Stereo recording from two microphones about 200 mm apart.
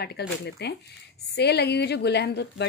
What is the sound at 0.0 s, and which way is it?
A woman's voice, 55° left (ahead or behind).